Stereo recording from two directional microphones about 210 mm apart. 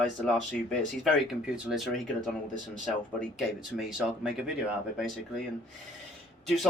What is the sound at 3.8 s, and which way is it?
Speech, centre (ahead or behind).